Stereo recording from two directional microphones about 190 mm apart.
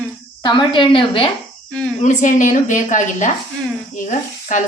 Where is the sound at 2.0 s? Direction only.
40° left (ahead or behind).